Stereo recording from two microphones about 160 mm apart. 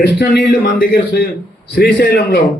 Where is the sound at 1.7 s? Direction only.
85° left.